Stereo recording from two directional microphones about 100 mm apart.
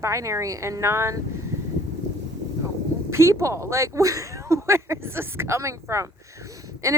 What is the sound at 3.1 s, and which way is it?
Speech, 25° right (ahead or behind).